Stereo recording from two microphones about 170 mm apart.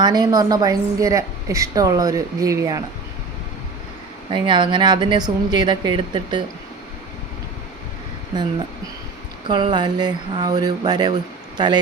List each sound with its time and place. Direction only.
0.0 s a woman's voice: 25° right (ahead or behind)
4.3 s a woman's voice: 30° right (ahead or behind)
9.5 s a woman's voice: 25° right (ahead or behind)